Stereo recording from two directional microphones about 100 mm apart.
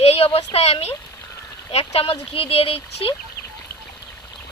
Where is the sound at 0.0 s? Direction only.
85° left.